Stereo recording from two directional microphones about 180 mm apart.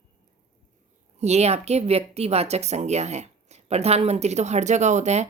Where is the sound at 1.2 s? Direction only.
35° right (ahead or behind).